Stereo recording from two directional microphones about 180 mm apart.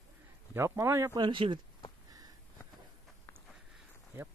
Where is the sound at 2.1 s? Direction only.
20° right (ahead or behind).